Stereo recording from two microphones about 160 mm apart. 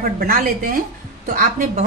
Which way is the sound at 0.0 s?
65° right (ahead or behind).